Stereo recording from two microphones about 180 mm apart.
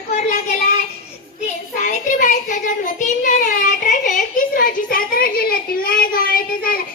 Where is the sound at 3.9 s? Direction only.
45° left (ahead or behind).